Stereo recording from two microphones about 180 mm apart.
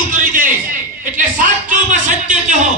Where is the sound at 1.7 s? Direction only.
45° right (ahead or behind).